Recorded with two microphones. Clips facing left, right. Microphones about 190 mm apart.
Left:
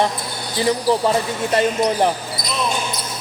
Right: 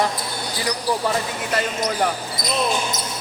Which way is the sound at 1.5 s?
25° left (ahead or behind).